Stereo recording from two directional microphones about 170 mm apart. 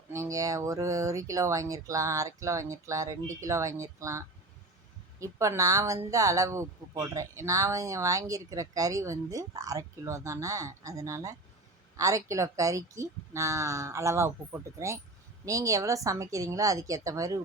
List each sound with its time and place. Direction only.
0.1 s speech: 20° right (ahead or behind)
5.2 s speech: 20° right (ahead or behind)